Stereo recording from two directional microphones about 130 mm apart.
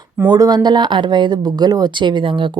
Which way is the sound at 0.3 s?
30° right (ahead or behind).